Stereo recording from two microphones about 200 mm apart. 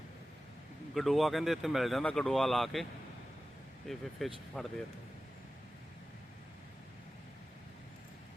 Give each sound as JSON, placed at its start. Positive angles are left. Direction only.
{"t": 0.9, "sound": "speech", "side_deg": 0}
{"t": 3.8, "sound": "speech", "side_deg": 0}